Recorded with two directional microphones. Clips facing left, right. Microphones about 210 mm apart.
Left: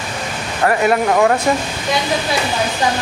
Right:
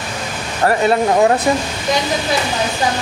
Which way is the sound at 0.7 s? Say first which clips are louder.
Right 1 dB; 30° right (ahead or behind).